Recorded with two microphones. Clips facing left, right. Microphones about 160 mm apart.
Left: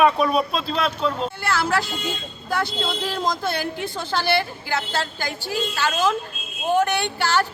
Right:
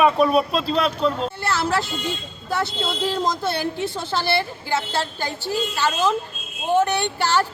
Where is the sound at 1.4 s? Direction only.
30° right (ahead or behind).